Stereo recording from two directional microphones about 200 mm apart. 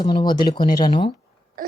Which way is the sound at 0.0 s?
20° left (ahead or behind).